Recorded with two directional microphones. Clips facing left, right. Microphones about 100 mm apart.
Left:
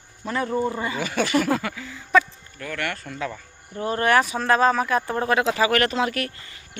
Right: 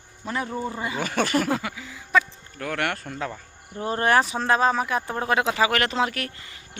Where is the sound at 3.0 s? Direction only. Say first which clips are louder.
Left 1 dB; 35° right (ahead or behind).